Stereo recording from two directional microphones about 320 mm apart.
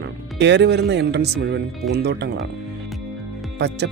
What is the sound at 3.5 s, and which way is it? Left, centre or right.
Speech, right.